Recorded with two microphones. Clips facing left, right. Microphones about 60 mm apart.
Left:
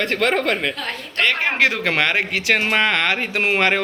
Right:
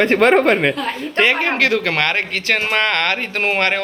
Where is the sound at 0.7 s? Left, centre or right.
Centre.